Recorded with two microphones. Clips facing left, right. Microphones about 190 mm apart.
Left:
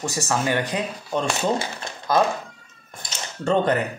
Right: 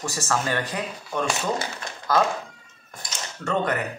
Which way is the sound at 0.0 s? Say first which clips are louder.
Left 2 dB; 15° left (ahead or behind).